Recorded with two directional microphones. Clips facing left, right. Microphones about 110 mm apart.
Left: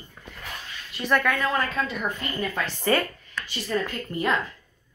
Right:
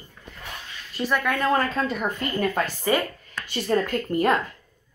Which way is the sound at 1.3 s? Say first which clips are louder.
Right 3 dB; 45° right (ahead or behind).